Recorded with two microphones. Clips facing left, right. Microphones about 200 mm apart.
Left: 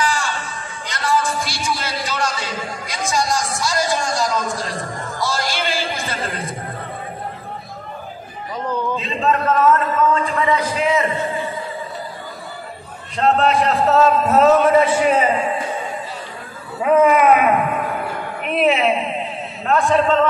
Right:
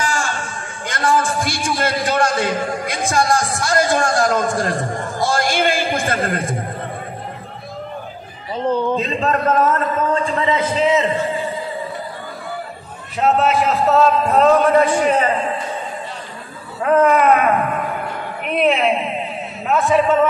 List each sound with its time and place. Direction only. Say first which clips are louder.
0.0 s a man's voice: even; 45° right (ahead or behind)
5.2 s a sound: right 5 dB; 50° right (ahead or behind)
8.9 s a man's voice: right 1 dB; 40° right (ahead or behind)
10.4 s a man's voice: right 3 dB; 25° right (ahead or behind)
13.2 s a man's voice: even; 5° right (ahead or behind)
16.8 s a woman's voice: even; 5° left (ahead or behind); by 20.2 s 10° right (ahead or behind)